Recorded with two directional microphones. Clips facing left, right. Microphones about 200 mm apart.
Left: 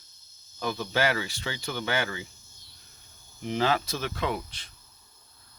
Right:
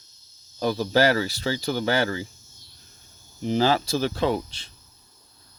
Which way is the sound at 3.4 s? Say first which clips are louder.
Right 5 dB; 35° right (ahead or behind).